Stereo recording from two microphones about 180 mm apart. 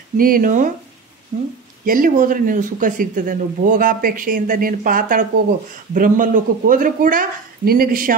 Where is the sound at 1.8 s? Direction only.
50° right (ahead or behind).